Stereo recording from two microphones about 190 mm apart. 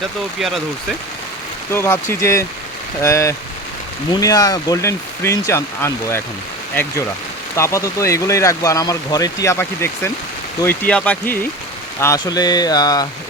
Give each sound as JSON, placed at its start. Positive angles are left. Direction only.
{"t": 0.3, "sound": "speech", "side_deg": 0}
{"t": 1.7, "sound": "speech", "side_deg": 15}
{"t": 7.5, "sound": "speech", "side_deg": 15}